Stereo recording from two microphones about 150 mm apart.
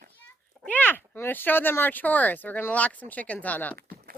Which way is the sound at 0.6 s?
10° left (ahead or behind).